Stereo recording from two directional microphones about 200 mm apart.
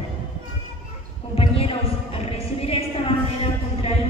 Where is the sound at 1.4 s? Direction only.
30° left (ahead or behind).